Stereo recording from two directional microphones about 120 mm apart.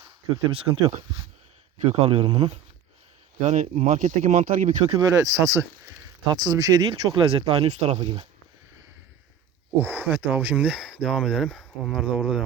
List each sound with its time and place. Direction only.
0.5 s speech: 55° right (ahead or behind)
3.4 s speech: 85° right; by 4.9 s 60° right (ahead or behind)
4.9 s speech: 25° right (ahead or behind)
7.3 s speech: 50° right (ahead or behind)
10.0 s speech: 15° right (ahead or behind)